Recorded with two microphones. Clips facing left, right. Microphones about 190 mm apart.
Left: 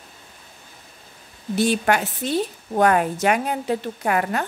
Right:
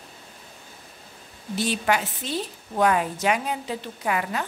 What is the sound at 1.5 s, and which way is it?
A woman's voice, 55° left (ahead or behind).